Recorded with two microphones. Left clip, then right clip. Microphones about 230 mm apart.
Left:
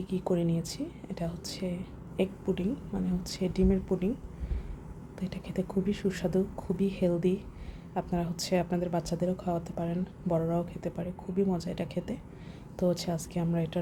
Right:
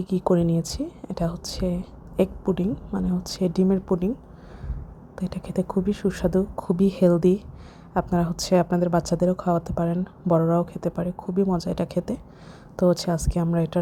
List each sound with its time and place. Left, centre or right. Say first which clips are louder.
0.0 s a woman's voice: right 8 dB; right
5.1 s a woman's voice: right 7 dB; right